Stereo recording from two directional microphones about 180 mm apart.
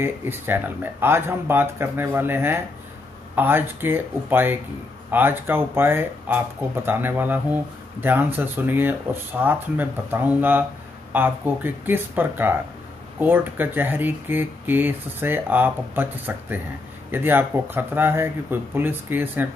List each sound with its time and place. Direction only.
0.0 s speech: 10° right (ahead or behind)